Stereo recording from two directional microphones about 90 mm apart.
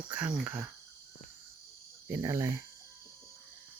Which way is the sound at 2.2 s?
35° right (ahead or behind).